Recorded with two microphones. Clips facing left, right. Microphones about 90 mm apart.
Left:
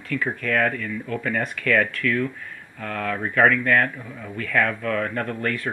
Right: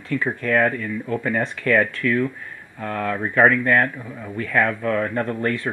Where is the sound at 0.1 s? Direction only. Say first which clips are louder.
Right 3 dB; 25° right (ahead or behind).